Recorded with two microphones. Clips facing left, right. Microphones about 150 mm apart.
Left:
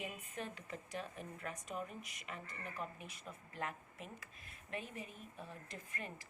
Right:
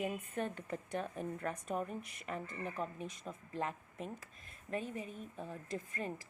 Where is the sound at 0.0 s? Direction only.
50° right (ahead or behind).